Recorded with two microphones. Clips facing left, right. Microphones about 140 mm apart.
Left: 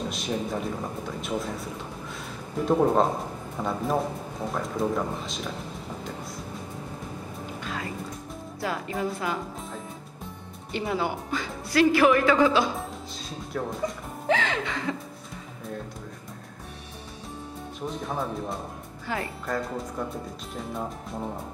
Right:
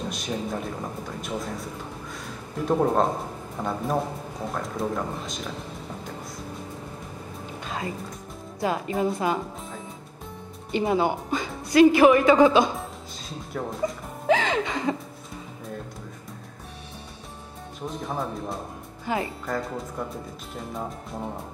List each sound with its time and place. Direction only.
0.1 s speech: centre (ahead or behind)
7.6 s music: 25° right (ahead or behind)
8.5 s speech: 20° right (ahead or behind)
10.7 s speech: 20° right (ahead or behind)
13.5 s speech: centre (ahead or behind)
14.2 s speech: 15° right (ahead or behind)
17.8 s speech: centre (ahead or behind)
19.1 s speech: 20° right (ahead or behind)
19.4 s speech: centre (ahead or behind)